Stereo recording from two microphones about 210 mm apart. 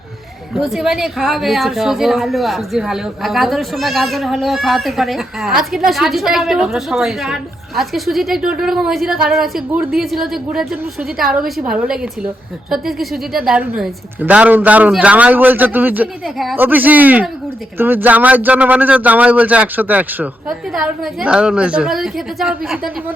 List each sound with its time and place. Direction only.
0.5 s speech: centre (ahead or behind)